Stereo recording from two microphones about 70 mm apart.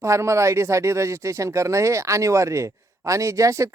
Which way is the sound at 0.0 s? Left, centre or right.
Right.